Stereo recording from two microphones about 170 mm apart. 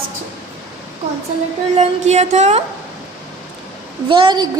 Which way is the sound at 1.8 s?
40° right (ahead or behind).